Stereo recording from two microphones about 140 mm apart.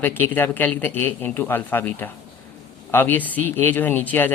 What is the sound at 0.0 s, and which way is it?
Speech, 15° left (ahead or behind).